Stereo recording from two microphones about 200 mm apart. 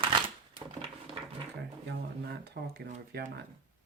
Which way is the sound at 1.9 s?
55° right (ahead or behind).